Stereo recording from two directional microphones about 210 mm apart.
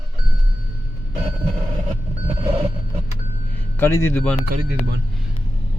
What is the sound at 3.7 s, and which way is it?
Speech, 10° left (ahead or behind).